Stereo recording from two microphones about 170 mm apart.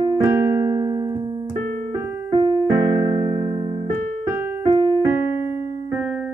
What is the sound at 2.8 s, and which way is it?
Music, 35° right (ahead or behind).